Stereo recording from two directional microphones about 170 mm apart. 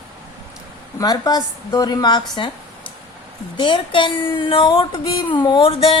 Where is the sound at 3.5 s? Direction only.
30° left (ahead or behind).